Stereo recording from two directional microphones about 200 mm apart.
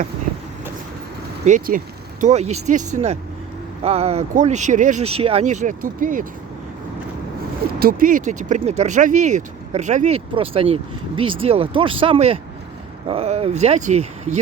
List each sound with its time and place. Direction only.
1.5 s speech: 40° right (ahead or behind)
7.8 s speech: 45° right (ahead or behind)